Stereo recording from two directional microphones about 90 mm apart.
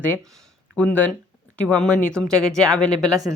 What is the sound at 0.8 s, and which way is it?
A woman's voice, 15° left (ahead or behind).